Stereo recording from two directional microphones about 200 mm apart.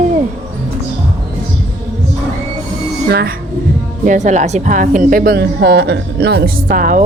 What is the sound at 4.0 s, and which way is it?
A woman's voice, 40° right (ahead or behind).